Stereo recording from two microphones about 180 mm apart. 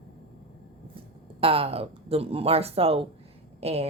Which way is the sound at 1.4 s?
30° right (ahead or behind).